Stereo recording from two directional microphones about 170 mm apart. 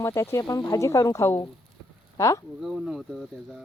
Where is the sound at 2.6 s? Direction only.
Centre (ahead or behind).